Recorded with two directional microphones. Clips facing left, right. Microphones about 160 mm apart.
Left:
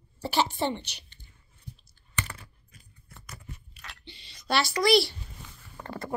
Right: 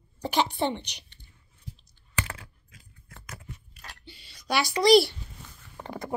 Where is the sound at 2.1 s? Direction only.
90° right.